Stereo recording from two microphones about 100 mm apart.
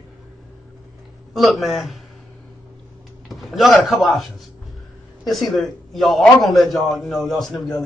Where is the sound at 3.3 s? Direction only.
Centre (ahead or behind).